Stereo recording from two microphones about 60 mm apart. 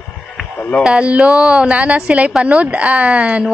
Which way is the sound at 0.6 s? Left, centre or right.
Left.